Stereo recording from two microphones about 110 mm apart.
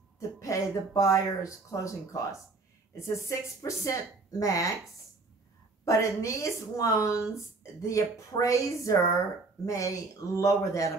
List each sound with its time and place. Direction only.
0.4 s speech: 30° left (ahead or behind)
3.3 s a woman's voice: 30° left (ahead or behind)
5.9 s speech: 30° left (ahead or behind)